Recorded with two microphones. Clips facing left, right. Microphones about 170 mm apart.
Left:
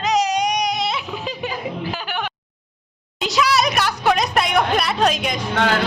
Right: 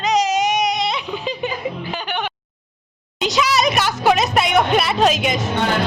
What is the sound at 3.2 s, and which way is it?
Speech, centre (ahead or behind).